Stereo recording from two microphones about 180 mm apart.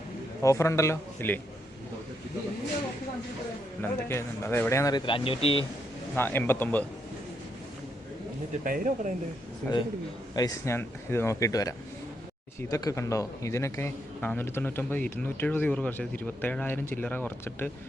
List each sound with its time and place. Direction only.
0.4 s speech: 15° left (ahead or behind)
3.8 s speech: 15° left (ahead or behind); by 5.6 s 30° left (ahead or behind)
6.1 s speech: 10° left (ahead or behind)
8.6 s speech: 50° right (ahead or behind)
9.6 s a man's voice: 5° left (ahead or behind)
10.3 s speech: 20° left (ahead or behind)